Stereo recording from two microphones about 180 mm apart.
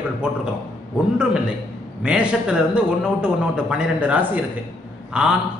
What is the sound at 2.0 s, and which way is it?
A man's voice, 5° right (ahead or behind).